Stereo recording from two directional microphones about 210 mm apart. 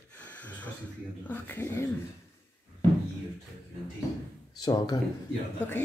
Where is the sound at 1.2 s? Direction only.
10° left (ahead or behind).